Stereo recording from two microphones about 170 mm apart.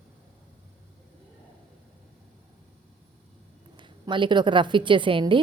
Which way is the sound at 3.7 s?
30° right (ahead or behind).